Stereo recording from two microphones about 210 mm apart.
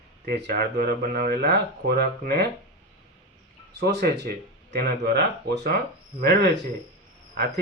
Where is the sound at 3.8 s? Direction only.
55° right (ahead or behind).